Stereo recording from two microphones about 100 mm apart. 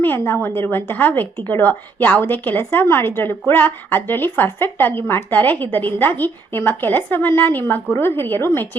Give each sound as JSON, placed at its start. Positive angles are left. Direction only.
{"t": 0.0, "sound": "a woman's voice", "side_deg": 20}